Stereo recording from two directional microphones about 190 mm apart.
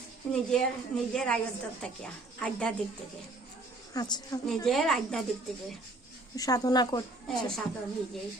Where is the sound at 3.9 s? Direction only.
20° left (ahead or behind).